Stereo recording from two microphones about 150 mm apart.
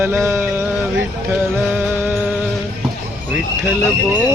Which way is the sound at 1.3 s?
10° right (ahead or behind).